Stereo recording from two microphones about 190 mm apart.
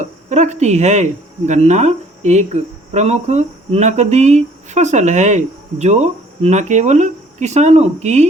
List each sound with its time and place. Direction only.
0.0 s speech: 40° right (ahead or behind)